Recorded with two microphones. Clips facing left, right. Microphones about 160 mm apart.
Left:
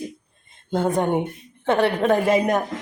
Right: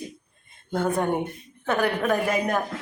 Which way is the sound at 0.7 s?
20° left (ahead or behind).